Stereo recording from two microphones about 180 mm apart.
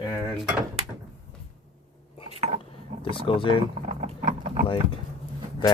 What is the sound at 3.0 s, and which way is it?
Speech, 30° left (ahead or behind).